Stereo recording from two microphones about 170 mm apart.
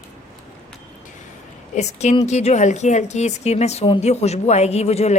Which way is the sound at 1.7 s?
40° left (ahead or behind).